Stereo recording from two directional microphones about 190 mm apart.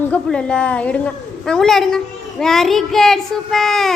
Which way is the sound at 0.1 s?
5° left (ahead or behind).